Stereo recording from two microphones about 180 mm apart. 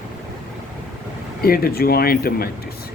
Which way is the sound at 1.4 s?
55° left (ahead or behind).